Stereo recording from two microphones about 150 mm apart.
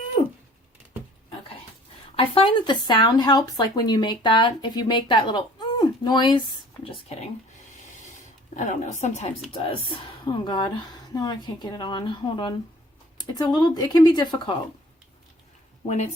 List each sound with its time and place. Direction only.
0.2 s a sound: 45° left (ahead or behind)
2.1 s speech: 35° left (ahead or behind)
8.5 s speech: 50° left (ahead or behind)
9.5 s speech: 40° left (ahead or behind)
15.9 s speech: 50° left (ahead or behind)